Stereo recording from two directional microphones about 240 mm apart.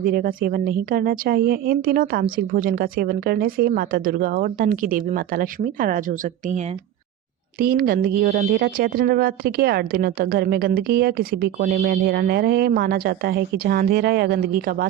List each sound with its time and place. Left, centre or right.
0.0 s speech: right
7.6 s speech: right